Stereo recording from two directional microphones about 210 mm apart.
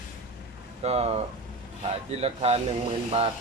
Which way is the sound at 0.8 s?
30° right (ahead or behind).